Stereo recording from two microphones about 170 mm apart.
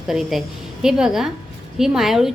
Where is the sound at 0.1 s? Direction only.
Centre (ahead or behind).